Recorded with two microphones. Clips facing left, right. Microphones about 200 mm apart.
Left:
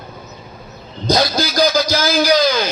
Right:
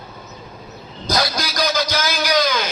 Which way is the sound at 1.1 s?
25° left (ahead or behind).